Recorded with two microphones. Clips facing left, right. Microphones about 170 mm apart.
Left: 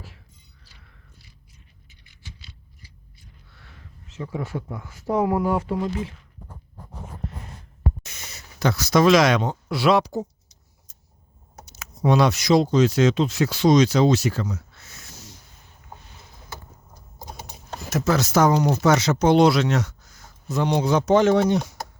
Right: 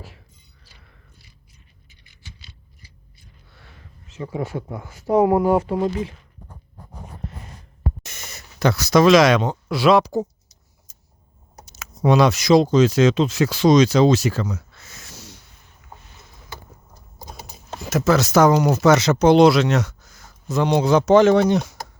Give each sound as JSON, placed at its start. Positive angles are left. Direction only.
{"t": 4.1, "sound": "speech", "side_deg": -15}
{"t": 8.2, "sound": "speech", "side_deg": -55}
{"t": 11.6, "sound": "speech", "side_deg": -90}
{"t": 17.8, "sound": "speech", "side_deg": -90}